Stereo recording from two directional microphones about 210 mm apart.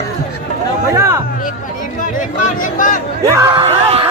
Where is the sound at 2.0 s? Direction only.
35° left (ahead or behind).